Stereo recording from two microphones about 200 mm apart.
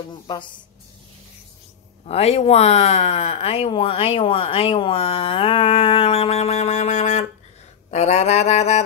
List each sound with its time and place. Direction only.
0.1 s speech: 25° left (ahead or behind)
2.0 s speech: 30° left (ahead or behind)
7.9 s a sound: 35° left (ahead or behind)